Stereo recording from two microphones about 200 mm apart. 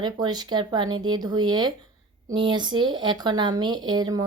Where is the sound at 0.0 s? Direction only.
20° right (ahead or behind).